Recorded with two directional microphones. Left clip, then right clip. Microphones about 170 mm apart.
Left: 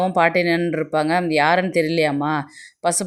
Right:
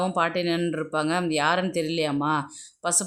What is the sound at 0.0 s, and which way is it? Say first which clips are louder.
Speech: left 7 dB; 20° left (ahead or behind).